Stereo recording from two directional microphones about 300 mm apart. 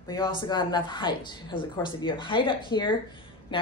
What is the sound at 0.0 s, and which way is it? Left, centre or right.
Speech, centre.